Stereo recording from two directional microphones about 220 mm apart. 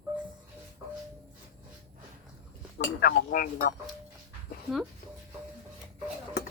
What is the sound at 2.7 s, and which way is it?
Speech, 45° left (ahead or behind).